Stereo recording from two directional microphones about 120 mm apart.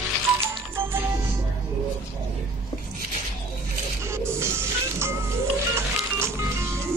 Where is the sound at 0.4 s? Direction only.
20° right (ahead or behind).